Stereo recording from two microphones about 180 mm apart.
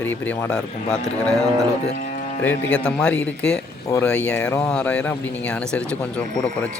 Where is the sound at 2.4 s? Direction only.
10° left (ahead or behind).